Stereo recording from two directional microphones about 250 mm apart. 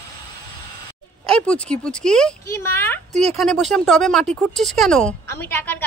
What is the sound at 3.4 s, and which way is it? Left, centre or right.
Speech, centre.